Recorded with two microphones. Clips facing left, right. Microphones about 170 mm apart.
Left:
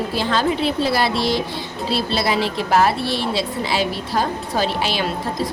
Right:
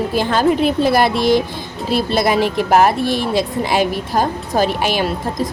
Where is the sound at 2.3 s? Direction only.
15° right (ahead or behind).